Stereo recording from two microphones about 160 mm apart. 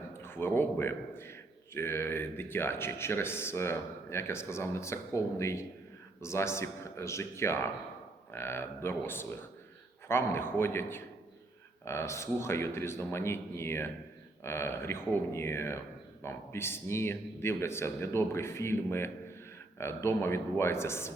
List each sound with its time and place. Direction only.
0.1 s a man's voice: 15° left (ahead or behind)